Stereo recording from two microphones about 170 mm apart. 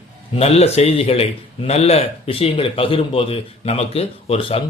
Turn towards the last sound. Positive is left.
turn(degrees=30)  # may be behind; listen again after turning